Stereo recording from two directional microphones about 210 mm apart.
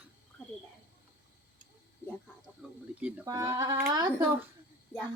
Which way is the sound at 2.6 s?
5° right (ahead or behind).